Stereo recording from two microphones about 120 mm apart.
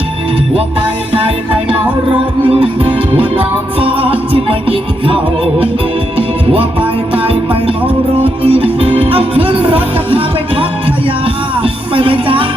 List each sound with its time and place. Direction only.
2.5 s music: 50° right (ahead or behind)
6.1 s music: 50° right (ahead or behind)